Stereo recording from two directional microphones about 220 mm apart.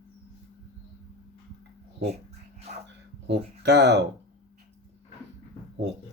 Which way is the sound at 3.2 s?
50° right (ahead or behind).